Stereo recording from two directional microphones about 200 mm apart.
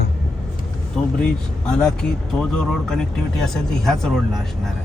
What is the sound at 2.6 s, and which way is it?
Speech, 5° left (ahead or behind).